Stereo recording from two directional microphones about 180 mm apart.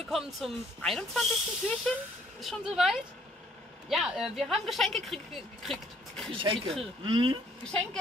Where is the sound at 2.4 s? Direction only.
Centre (ahead or behind).